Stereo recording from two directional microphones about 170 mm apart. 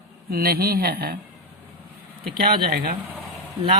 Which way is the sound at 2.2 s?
60° right (ahead or behind).